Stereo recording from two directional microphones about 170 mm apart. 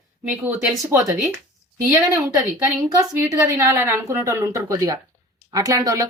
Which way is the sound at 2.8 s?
15° right (ahead or behind).